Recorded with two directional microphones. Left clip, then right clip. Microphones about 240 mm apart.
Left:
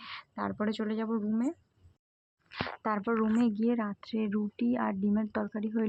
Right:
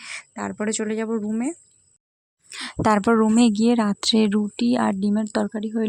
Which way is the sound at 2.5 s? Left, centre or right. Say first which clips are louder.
Right 12 dB; right.